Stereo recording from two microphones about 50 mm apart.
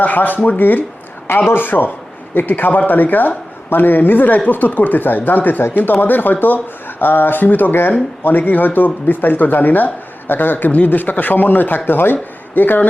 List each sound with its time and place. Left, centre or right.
0.0 s speech: left